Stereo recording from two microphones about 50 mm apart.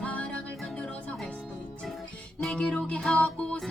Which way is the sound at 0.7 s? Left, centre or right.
Left.